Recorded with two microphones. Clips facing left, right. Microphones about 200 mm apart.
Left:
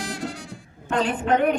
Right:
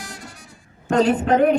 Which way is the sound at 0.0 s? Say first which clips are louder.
Left 8 dB; 80° left.